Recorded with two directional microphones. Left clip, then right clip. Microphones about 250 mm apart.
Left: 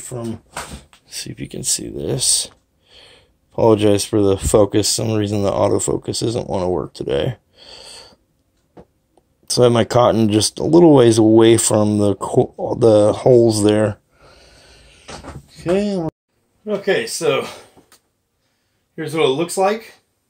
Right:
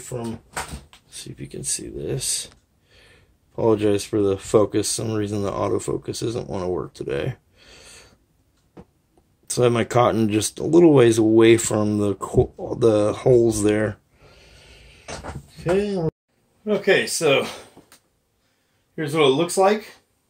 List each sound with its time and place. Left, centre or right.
0.1 s speech: left
9.5 s speech: centre
15.5 s speech: left
16.6 s speech: centre
18.9 s speech: centre